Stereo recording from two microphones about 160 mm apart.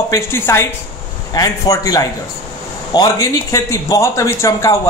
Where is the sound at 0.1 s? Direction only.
15° left (ahead or behind).